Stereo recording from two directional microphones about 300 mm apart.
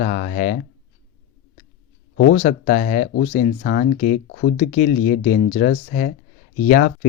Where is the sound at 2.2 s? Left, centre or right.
Left.